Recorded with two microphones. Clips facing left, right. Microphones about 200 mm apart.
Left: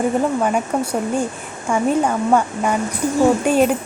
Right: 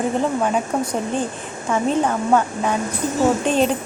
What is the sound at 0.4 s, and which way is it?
Speech, 10° left (ahead or behind).